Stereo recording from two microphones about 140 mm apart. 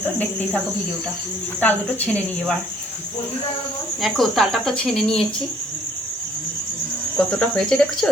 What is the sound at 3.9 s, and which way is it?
Speech, centre (ahead or behind).